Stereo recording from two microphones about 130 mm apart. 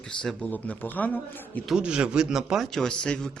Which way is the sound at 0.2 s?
5° left (ahead or behind).